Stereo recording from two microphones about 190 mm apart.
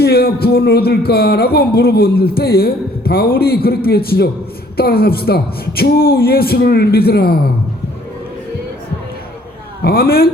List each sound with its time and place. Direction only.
0.0 s speech: 55° left (ahead or behind)
9.8 s a man's voice: 55° left (ahead or behind)